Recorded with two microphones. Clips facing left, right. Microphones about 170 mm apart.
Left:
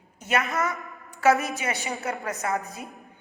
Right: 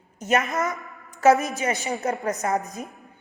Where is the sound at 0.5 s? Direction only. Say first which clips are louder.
Right 1 dB; 20° right (ahead or behind).